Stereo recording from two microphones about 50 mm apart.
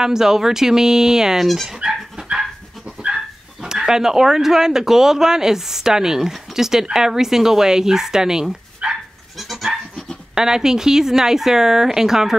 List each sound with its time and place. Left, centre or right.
0.0 s speech: centre
2.2 s dog: right
3.6 s speech: centre
9.4 s goat: centre
10.3 s speech: centre